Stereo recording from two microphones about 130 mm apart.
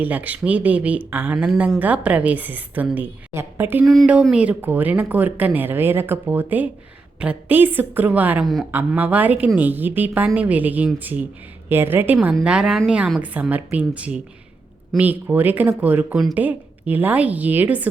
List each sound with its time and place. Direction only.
0.0 s speech: 10° right (ahead or behind)